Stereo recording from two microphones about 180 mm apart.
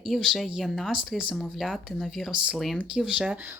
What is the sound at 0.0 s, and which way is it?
Speech, centre (ahead or behind).